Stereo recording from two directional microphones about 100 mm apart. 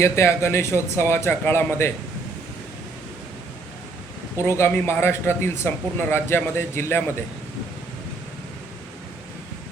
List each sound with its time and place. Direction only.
0.0 s speech: 25° left (ahead or behind)
4.4 s speech: 25° left (ahead or behind)